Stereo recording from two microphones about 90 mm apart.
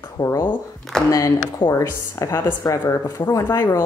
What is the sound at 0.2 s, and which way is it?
Speech, 65° left (ahead or behind).